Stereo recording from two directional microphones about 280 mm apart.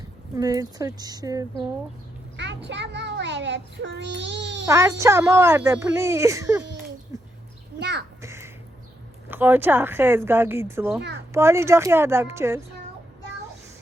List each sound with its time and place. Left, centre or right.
0.3 s speech: centre
2.3 s vehicle: right
2.6 s a child's voice: right
4.6 s speech: centre
7.8 s a child's voice: right
8.2 s crow: centre
9.3 s speech: centre